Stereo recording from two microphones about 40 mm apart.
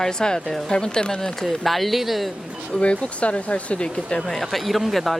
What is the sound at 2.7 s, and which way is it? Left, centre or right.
Speech, left.